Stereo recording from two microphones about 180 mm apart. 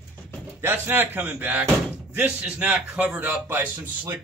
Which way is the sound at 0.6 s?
10° right (ahead or behind).